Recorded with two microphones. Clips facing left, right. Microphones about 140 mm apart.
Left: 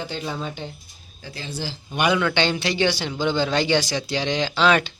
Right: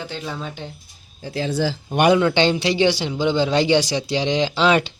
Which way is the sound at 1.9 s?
50° right (ahead or behind).